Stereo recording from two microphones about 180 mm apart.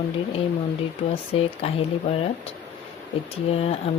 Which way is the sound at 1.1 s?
30° left (ahead or behind).